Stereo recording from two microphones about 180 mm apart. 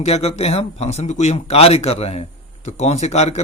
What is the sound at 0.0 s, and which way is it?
A man's voice, 35° left (ahead or behind).